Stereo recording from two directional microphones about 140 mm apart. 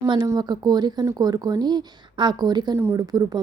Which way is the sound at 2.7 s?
20° right (ahead or behind).